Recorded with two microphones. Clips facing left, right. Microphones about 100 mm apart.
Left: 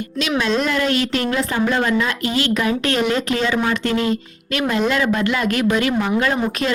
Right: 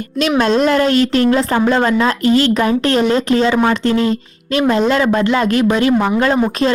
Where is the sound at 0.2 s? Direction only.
45° right (ahead or behind).